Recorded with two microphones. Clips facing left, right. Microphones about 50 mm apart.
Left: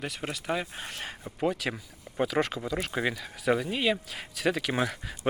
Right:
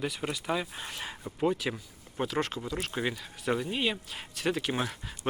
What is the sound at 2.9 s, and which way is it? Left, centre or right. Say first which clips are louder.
Speech: left 3 dB; left.